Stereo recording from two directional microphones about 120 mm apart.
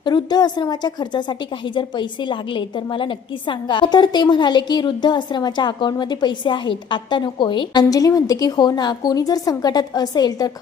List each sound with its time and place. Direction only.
0.0 s a woman's voice: 35° left (ahead or behind)